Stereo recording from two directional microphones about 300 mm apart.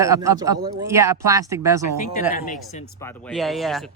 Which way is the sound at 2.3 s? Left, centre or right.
Left.